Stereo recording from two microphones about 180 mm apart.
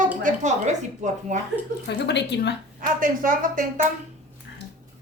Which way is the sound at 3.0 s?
50° right (ahead or behind).